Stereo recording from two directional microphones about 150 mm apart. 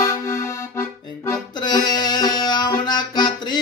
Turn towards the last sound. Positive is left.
turn(degrees=30)  # may be behind; listen again after turning